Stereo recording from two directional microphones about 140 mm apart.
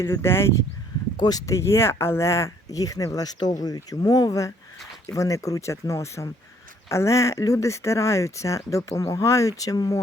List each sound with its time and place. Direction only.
0.0 s speech: 20° left (ahead or behind)
1.1 s speech: 30° left (ahead or behind)